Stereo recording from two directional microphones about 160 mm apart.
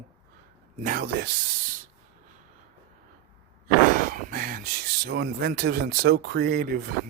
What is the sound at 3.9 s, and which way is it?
Speech, 60° right (ahead or behind).